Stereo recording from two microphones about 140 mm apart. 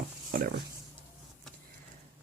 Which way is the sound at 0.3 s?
90° right.